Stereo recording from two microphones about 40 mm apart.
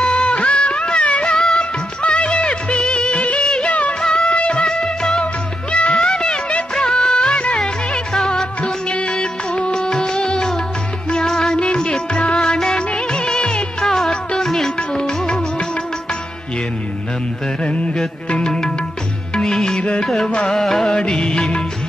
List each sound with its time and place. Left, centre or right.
0.0 s music: left
1.2 s music: centre
1.6 s music of bollywood: left
3.4 s music of bollywood: left
4.0 s music: left
8.9 s music of bollywood: left
9.8 s music: centre
14.4 s music: centre
14.9 s music: left
17.6 s music: left
20.2 s music: left
20.5 s music: centre
20.8 s music of bollywood: centre